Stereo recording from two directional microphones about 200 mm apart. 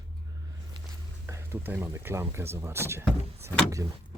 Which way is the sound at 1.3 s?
15° right (ahead or behind).